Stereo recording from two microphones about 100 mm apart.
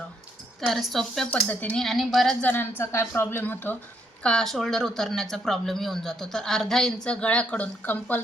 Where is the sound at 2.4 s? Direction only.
20° left (ahead or behind).